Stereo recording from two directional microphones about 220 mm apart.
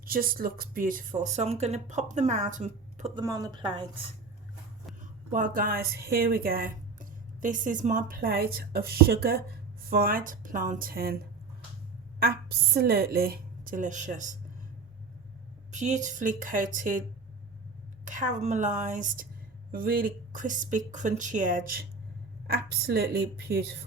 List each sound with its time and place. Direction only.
0.0 s a woman's voice: 40° right (ahead or behind)
3.2 s a woman's voice: 15° right (ahead or behind)
5.3 s a woman's voice: 40° right (ahead or behind)
12.2 s a woman's voice: 45° right (ahead or behind)
15.7 s a woman's voice: 35° right (ahead or behind)
18.0 s a woman's voice: 35° right (ahead or behind)